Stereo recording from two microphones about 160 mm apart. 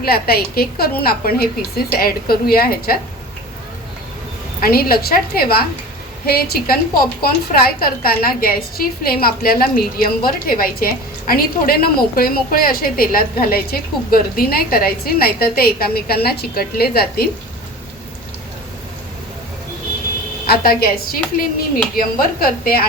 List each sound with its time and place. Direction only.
0.0 s a woman's voice: 70° left (ahead or behind)
4.6 s a woman's voice: 70° left (ahead or behind)
20.5 s speech: 65° left (ahead or behind)